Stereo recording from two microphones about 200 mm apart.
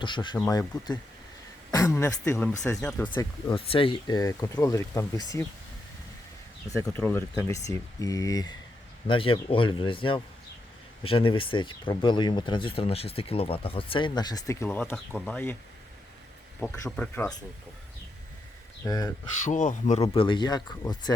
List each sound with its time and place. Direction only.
0.0 s speech: 25° left (ahead or behind)
3.5 s speech: 25° left (ahead or behind)
6.7 s speech: 15° left (ahead or behind)
16.6 s speech: 5° left (ahead or behind)
18.9 s speech: 15° left (ahead or behind)
19.5 s speech: 40° left (ahead or behind); by 21.0 s 20° left (ahead or behind)